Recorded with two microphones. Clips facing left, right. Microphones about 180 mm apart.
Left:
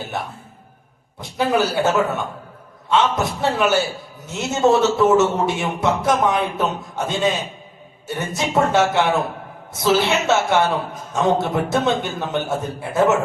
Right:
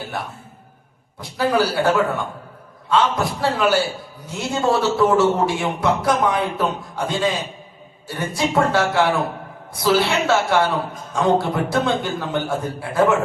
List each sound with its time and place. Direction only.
1.2 s a man's voice: 20° left (ahead or behind)